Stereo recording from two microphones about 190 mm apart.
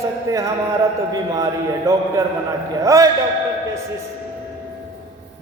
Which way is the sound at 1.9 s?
15° right (ahead or behind).